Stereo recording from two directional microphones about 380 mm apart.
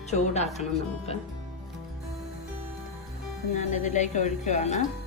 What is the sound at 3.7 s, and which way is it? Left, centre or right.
A woman's voice, centre.